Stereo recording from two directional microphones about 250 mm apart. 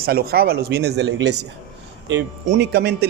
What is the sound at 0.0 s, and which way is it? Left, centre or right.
Speech, right.